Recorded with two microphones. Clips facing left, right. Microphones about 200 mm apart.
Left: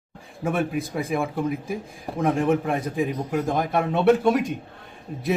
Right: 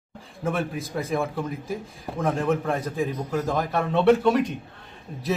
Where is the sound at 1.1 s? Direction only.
15° left (ahead or behind).